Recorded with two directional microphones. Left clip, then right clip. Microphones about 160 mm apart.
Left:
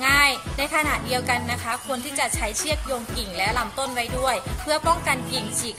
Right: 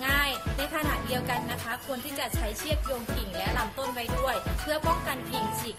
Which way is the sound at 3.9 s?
10° left (ahead or behind).